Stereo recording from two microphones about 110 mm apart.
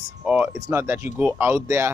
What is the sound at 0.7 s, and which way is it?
Speech, 20° right (ahead or behind).